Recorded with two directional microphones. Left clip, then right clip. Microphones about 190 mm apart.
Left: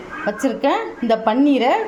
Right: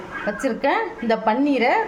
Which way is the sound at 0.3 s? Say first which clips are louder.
Left 3 dB; 20° left (ahead or behind).